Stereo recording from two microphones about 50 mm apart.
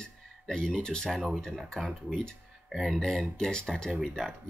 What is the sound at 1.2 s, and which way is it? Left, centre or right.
Speech, centre.